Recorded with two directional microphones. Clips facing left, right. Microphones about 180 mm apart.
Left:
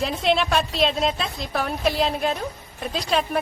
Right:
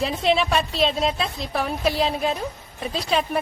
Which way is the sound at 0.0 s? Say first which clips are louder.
Right 1 dB; centre (ahead or behind).